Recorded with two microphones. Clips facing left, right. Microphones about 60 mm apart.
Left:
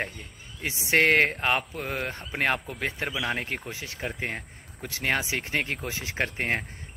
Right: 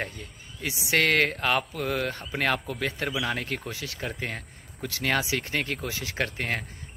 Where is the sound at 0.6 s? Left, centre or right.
Left.